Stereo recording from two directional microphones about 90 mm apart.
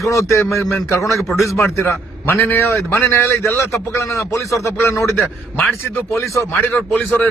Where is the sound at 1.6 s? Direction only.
25° left (ahead or behind).